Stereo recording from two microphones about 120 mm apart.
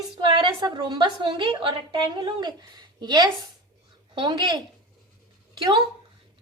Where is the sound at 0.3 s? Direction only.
40° right (ahead or behind).